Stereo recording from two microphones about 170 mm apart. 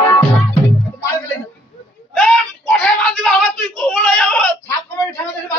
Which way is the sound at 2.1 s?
Centre (ahead or behind).